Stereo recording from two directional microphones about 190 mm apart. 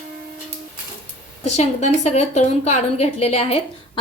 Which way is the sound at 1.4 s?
35° left (ahead or behind).